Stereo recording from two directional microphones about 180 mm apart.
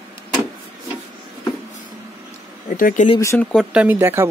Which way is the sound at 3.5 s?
5° right (ahead or behind).